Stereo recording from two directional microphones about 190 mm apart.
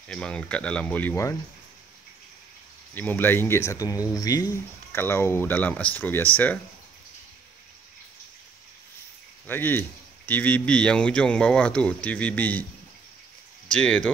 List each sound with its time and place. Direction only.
0.1 s speech: 5° left (ahead or behind)
2.9 s speech: 10° left (ahead or behind)
9.5 s speech: 10° left (ahead or behind)
13.7 s speech: 5° left (ahead or behind)